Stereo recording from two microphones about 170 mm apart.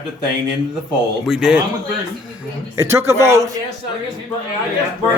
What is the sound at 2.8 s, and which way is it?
Speech, 15° right (ahead or behind).